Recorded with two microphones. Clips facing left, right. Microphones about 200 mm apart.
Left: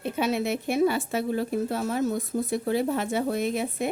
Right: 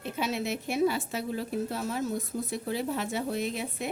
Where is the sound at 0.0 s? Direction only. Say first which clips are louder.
Left 5 dB; 55° left (ahead or behind).